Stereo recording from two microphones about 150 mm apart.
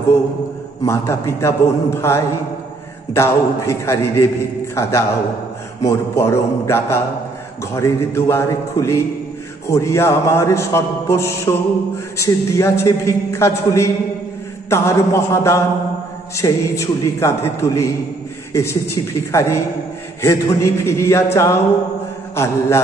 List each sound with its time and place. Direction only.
0.8 s a man's voice: 20° left (ahead or behind)